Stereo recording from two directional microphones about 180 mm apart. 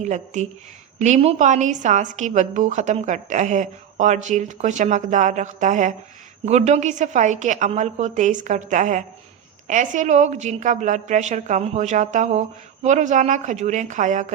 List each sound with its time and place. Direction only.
0.0 s a woman's voice: 40° right (ahead or behind)